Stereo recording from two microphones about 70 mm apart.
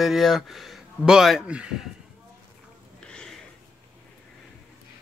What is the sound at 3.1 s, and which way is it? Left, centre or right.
Sniff, centre.